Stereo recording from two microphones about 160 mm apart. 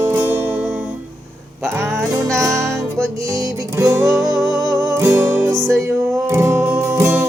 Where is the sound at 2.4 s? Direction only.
20° right (ahead or behind).